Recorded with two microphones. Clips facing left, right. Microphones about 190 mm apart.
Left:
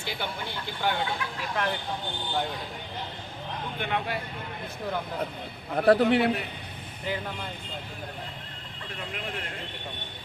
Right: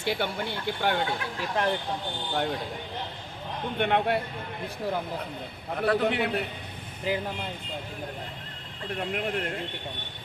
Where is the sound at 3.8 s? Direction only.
60° right (ahead or behind).